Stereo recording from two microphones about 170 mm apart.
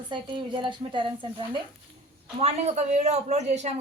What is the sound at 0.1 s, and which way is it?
Speech, 30° right (ahead or behind).